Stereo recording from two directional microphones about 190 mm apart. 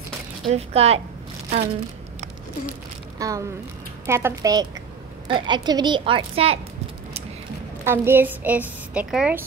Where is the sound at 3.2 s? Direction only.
20° right (ahead or behind).